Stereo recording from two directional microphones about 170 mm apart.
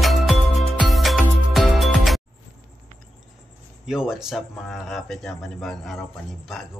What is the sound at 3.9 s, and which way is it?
A man's voice, 5° right (ahead or behind).